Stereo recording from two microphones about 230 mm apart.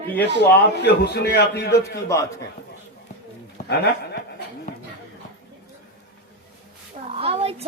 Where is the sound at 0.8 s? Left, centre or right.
Left.